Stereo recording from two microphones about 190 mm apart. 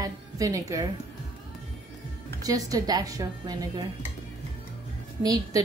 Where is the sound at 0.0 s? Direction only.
15° right (ahead or behind).